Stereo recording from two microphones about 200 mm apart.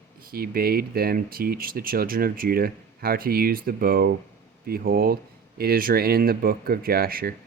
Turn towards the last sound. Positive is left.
turn(degrees=-50)  # may be behind; listen again after turning